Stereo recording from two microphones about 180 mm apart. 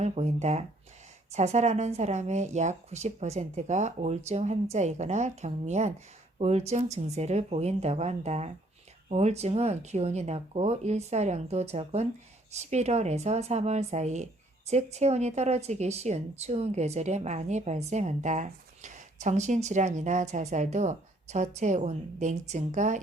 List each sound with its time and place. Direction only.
0.0 s speech: 40° right (ahead or behind)